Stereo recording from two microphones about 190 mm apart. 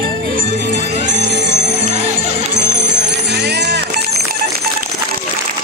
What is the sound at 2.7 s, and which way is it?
Music, 65° right (ahead or behind).